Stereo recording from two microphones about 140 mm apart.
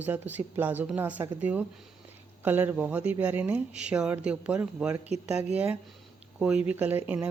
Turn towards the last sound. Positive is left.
turn(degrees=-10)  # may be behind; listen again after turning